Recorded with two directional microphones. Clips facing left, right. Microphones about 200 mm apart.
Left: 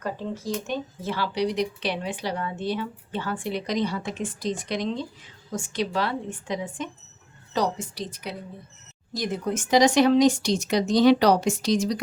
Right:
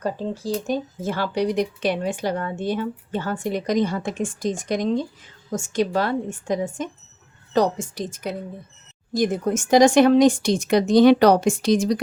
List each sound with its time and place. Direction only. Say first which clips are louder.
0.0 s speech: right 4 dB; 35° right (ahead or behind); by 12.0 s 55° right (ahead or behind)